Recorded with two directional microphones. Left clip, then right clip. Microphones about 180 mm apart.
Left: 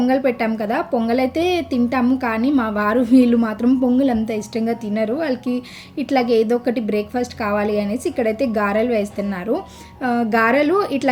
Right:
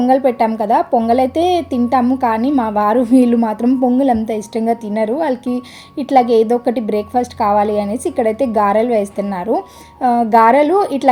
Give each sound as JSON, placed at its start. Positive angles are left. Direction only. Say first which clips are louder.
{"t": 0.0, "sound": "a woman's voice", "louder": "right 5 dB", "side_deg": -10}